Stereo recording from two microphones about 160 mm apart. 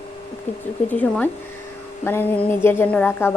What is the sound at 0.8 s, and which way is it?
A woman's voice, 10° left (ahead or behind).